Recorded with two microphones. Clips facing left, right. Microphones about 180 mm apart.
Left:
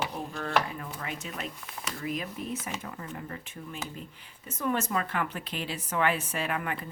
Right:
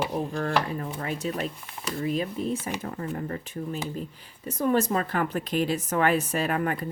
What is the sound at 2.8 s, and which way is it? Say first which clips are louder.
Speech: right 7 dB; 40° right (ahead or behind).